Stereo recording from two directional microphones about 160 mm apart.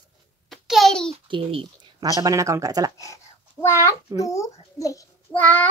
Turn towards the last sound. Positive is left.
turn(degrees=10)  # may be behind; listen again after turning